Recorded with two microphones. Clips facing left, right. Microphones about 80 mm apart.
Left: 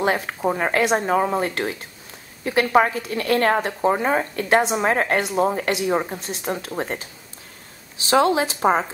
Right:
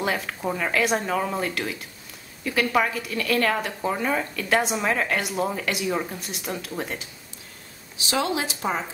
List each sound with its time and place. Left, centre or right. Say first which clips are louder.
0.0 s speech: left 5 dB; left
8.1 s speech: left 8 dB; left